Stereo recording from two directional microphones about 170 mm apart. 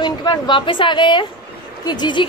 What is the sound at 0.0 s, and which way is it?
Speech, 25° left (ahead or behind).